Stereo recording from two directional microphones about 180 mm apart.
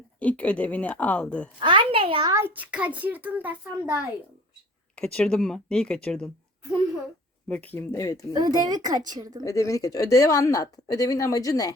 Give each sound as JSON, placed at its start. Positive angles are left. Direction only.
{"t": 0.2, "sound": "speech", "side_deg": 10}
{"t": 1.6, "sound": "a woman's voice", "side_deg": -25}
{"t": 2.3, "sound": "a child's voice", "side_deg": -10}
{"t": 4.9, "sound": "speech", "side_deg": 5}
{"t": 7.4, "sound": "speech", "side_deg": 5}
{"t": 8.3, "sound": "a woman's voice", "side_deg": -20}
{"t": 9.4, "sound": "a woman's voice", "side_deg": 20}